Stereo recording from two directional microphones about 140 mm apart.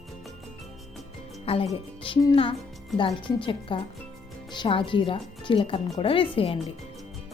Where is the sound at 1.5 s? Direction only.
45° left (ahead or behind).